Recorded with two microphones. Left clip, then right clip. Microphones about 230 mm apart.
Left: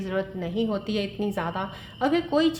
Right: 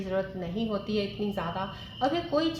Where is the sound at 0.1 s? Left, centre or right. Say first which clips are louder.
Left 2 dB; left.